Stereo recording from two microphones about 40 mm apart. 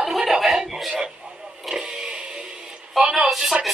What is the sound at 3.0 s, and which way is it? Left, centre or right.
Speech, centre.